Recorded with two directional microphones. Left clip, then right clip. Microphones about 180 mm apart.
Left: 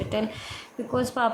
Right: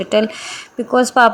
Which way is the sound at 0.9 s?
30° right (ahead or behind).